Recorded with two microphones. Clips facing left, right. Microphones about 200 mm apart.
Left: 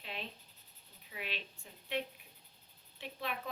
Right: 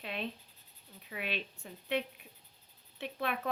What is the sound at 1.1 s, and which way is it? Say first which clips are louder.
Speech: right 5 dB; 60° right (ahead or behind).